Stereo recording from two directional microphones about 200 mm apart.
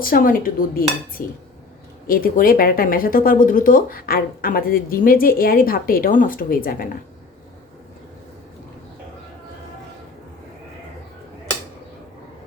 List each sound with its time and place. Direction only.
0.0 s speech: 45° left (ahead or behind)